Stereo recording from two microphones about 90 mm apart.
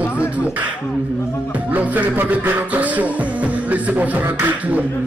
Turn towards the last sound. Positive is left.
turn(degrees=-20)  # may be behind; listen again after turning